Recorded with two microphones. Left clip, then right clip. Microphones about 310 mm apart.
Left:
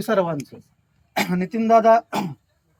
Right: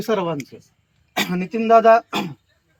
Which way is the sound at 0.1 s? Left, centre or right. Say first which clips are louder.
Left 1 dB; centre.